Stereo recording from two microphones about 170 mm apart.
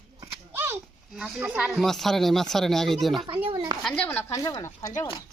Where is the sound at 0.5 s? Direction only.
15° right (ahead or behind).